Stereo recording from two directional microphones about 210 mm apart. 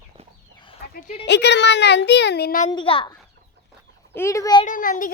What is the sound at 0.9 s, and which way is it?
Speech, 40° left (ahead or behind).